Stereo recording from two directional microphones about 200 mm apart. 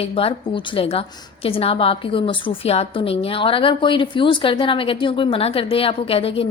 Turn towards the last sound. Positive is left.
turn(degrees=30)  # may be behind; listen again after turning